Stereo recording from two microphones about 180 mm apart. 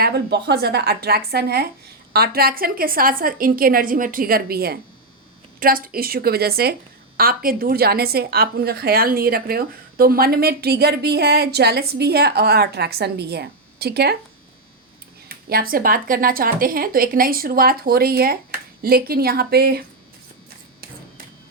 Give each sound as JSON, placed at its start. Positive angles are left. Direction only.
{"t": 0.0, "sound": "a woman's voice", "side_deg": -65}
{"t": 15.4, "sound": "a woman's voice", "side_deg": -55}